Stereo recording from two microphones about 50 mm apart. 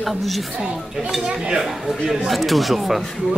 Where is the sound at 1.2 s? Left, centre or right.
Centre.